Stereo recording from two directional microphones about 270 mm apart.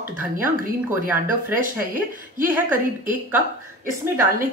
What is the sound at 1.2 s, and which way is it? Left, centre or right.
Speech, right.